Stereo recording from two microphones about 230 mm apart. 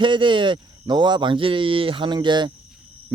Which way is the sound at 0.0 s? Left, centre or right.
Right.